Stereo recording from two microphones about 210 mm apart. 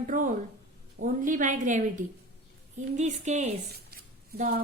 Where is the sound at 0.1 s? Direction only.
40° right (ahead or behind).